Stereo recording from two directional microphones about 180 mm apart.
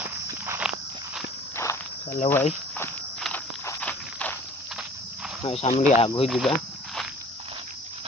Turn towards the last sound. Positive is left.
turn(degrees=0)  # may be behind; listen again after turning